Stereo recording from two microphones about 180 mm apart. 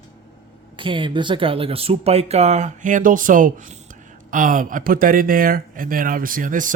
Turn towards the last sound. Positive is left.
turn(degrees=-45)  # may be behind; listen again after turning